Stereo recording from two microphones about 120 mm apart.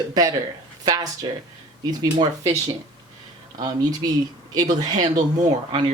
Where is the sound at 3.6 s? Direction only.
35° right (ahead or behind).